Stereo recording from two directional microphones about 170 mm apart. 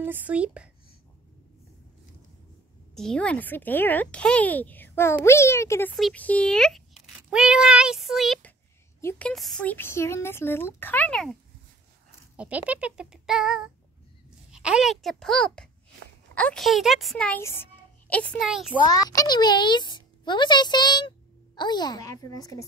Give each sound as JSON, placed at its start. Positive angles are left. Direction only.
{"t": 0.0, "sound": "a child's voice", "side_deg": -10}
{"t": 2.9, "sound": "speech", "side_deg": 5}
{"t": 12.4, "sound": "a child's voice", "side_deg": -10}
{"t": 17.4, "sound": "a child's voice", "side_deg": 15}
{"t": 19.0, "sound": "a child's voice", "side_deg": 25}